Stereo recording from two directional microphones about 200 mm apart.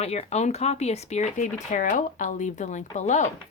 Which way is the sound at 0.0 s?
30° left (ahead or behind).